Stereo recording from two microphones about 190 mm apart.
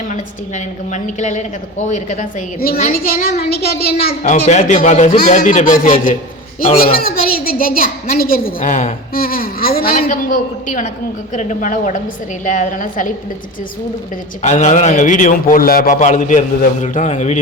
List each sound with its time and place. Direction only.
0.1 s a man's voice: 40° left (ahead or behind)
14.4 s a man's voice: 40° left (ahead or behind)